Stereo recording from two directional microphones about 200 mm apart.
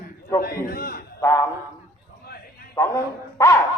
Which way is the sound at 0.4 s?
50° left (ahead or behind).